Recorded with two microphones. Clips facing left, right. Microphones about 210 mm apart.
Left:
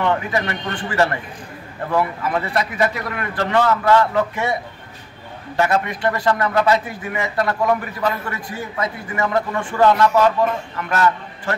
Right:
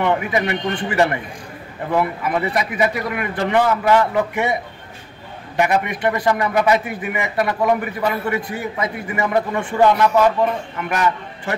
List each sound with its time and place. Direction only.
0.0 s a man's voice: 15° right (ahead or behind)
5.6 s a man's voice: 15° right (ahead or behind)